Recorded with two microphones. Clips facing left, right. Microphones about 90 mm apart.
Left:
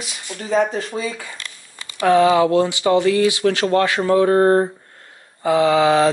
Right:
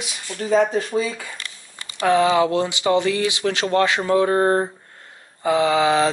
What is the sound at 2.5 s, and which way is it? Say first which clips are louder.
Speech: left 3 dB; 20° right (ahead or behind).